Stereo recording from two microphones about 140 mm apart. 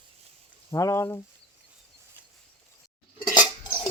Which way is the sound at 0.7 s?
25° left (ahead or behind).